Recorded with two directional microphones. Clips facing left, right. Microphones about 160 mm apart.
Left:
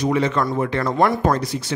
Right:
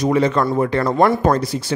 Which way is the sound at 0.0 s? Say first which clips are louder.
Right 3 dB; 40° right (ahead or behind).